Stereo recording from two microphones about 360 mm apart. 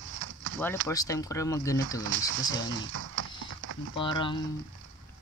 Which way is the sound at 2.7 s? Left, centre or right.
Right.